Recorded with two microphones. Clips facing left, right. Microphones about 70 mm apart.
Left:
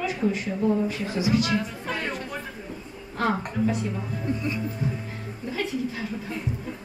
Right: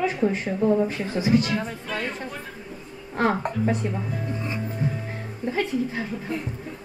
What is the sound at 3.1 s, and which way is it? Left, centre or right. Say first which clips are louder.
Speech: right 3 dB; right.